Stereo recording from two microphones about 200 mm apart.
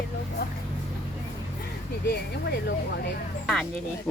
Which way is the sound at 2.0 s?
55° left (ahead or behind).